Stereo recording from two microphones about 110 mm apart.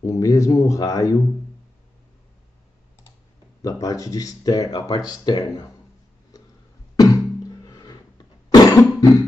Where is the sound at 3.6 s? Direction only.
30° left (ahead or behind).